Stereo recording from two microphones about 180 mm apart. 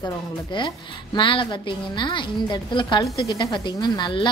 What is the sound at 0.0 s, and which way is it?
A woman's voice, 25° left (ahead or behind).